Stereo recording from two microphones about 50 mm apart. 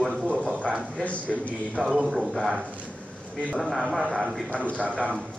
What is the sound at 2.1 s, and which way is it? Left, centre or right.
Speech, centre.